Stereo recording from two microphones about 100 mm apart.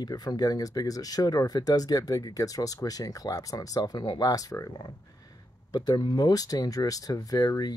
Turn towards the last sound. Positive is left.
turn(degrees=40)  # may be behind; listen again after turning